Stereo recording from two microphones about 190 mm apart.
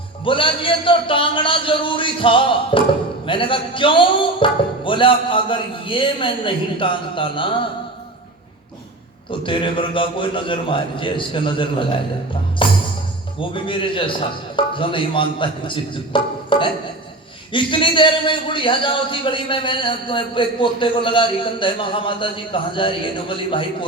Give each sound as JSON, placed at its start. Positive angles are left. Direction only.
{"t": 0.3, "sound": "a man's voice", "side_deg": 25}
{"t": 9.4, "sound": "a man's voice", "side_deg": 25}